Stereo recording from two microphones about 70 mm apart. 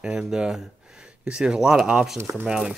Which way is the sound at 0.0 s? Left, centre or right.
Centre.